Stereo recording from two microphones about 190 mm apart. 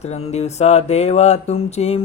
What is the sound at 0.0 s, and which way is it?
Speech, 35° left (ahead or behind).